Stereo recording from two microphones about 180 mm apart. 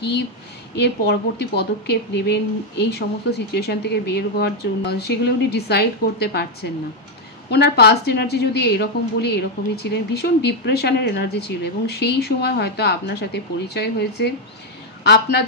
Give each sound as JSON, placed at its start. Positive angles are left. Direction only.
{"t": 0.7, "sound": "a woman's voice", "side_deg": 65}